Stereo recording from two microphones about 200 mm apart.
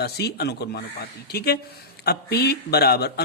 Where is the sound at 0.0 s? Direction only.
55° left (ahead or behind).